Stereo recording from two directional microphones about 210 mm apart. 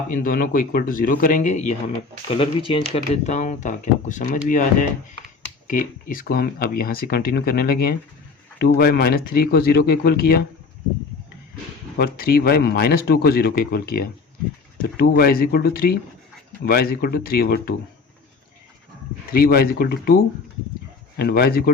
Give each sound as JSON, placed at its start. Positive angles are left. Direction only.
{"t": 0.1, "sound": "speech", "side_deg": 40}
{"t": 11.9, "sound": "speech", "side_deg": 45}
{"t": 19.3, "sound": "speech", "side_deg": 45}
{"t": 21.2, "sound": "speech", "side_deg": 50}